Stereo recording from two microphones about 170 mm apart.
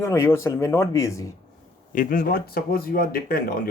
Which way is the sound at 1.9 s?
55° left (ahead or behind).